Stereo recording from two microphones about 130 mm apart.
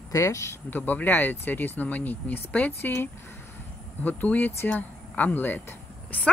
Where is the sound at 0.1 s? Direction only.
25° left (ahead or behind).